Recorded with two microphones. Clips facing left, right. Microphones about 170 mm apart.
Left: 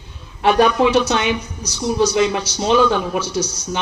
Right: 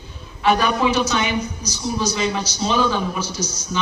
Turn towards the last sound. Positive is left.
turn(degrees=65)  # may be behind; listen again after turning